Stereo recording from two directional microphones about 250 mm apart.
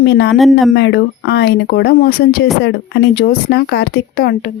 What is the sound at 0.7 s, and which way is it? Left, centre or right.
Speech, left.